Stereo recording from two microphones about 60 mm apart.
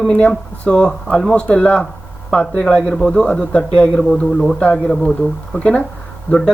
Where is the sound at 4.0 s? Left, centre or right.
Centre.